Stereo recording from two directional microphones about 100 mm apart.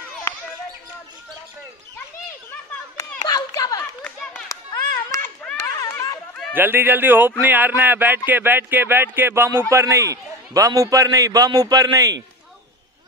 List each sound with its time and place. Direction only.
3.2 s a sound: 45° left (ahead or behind)
5.2 s children playing: 10° left (ahead or behind)
5.6 s chatter: 35° left (ahead or behind)
6.5 s a man's voice: 20° right (ahead or behind); by 12.2 s 40° right (ahead or behind)